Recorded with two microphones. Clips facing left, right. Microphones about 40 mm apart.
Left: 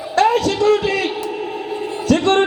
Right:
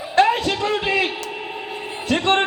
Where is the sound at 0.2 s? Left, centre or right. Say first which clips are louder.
Left 2 dB; right.